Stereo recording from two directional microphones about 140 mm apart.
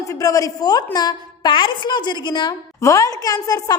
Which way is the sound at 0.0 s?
25° left (ahead or behind).